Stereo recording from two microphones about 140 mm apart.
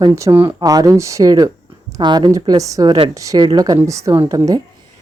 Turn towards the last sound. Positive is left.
turn(degrees=-25)  # may be behind; listen again after turning